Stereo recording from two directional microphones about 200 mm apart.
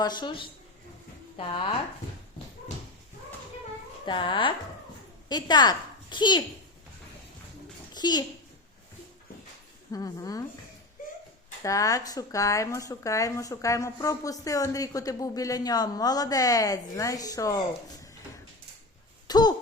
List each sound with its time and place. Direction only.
0.0 s a woman's voice: 20° left (ahead or behind)
4.0 s a woman's voice: 25° left (ahead or behind)
7.9 s a child's voice: 20° left (ahead or behind)
9.9 s speech: 15° left (ahead or behind)
11.6 s speech: 15° left (ahead or behind)
19.3 s speech: 20° left (ahead or behind)